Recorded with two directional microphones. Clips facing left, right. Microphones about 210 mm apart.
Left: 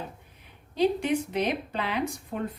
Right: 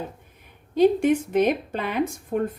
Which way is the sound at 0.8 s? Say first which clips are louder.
Right 6 dB; 50° right (ahead or behind).